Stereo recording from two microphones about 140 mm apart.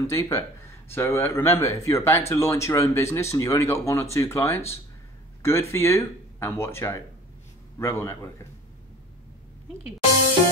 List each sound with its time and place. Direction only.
0.0 s speech: 20° left (ahead or behind)